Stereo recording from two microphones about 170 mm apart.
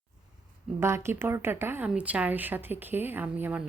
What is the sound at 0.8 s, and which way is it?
Speech, 15° right (ahead or behind).